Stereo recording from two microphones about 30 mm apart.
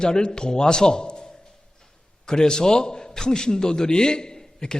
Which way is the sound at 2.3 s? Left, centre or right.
Left.